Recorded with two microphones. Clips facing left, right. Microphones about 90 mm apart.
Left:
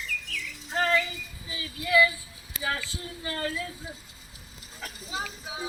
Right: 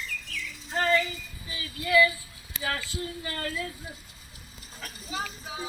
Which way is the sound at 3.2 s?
20° left (ahead or behind).